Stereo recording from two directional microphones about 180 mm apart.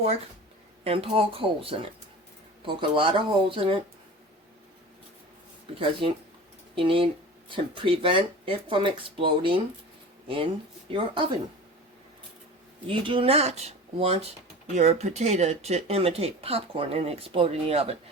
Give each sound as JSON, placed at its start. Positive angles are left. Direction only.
{"t": 0.9, "sound": "speech", "side_deg": -30}
{"t": 5.8, "sound": "speech", "side_deg": -30}
{"t": 12.9, "sound": "speech", "side_deg": -30}